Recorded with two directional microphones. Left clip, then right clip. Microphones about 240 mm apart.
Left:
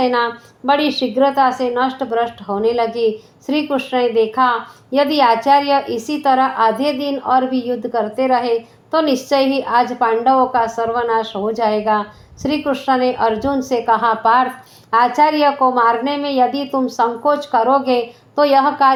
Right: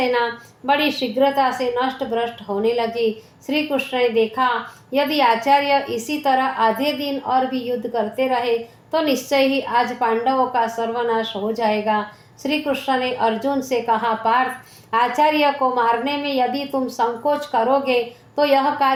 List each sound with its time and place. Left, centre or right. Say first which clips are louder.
0.0 s a woman's voice: left 3 dB; left